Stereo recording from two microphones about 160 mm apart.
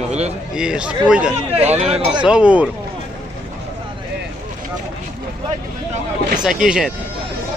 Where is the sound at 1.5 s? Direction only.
40° right (ahead or behind).